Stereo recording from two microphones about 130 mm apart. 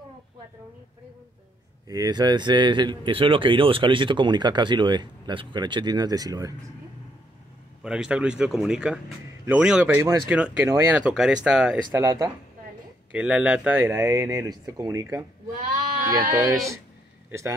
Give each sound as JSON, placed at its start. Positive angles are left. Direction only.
{"t": 1.9, "sound": "speech", "side_deg": -30}
{"t": 7.8, "sound": "speech", "side_deg": -5}
{"t": 9.9, "sound": "speech", "side_deg": -25}
{"t": 10.3, "sound": "speech", "side_deg": -10}
{"t": 11.9, "sound": "speech", "side_deg": -20}
{"t": 13.1, "sound": "speech", "side_deg": -10}
{"t": 16.3, "sound": "a man's voice", "side_deg": -25}